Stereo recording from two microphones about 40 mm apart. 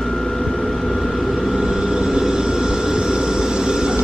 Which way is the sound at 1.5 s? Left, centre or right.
Right.